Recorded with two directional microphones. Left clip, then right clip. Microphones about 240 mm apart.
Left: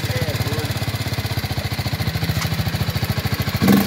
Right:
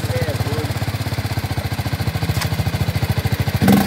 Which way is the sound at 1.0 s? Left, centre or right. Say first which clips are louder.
Even; centre.